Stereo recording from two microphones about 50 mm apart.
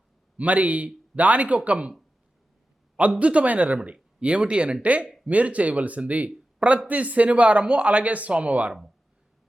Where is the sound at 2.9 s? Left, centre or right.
Right.